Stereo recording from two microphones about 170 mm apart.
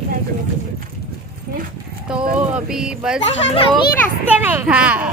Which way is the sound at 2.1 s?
5° right (ahead or behind).